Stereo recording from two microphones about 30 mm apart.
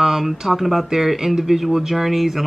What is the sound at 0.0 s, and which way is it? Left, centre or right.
Speech, centre.